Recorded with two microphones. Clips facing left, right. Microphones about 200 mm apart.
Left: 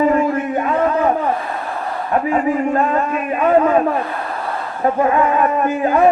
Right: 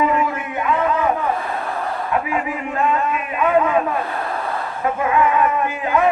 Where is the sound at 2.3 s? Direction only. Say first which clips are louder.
Left 7 dB; 40° left (ahead or behind).